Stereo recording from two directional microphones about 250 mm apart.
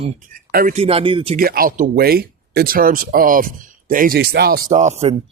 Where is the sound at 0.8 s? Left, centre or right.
Right.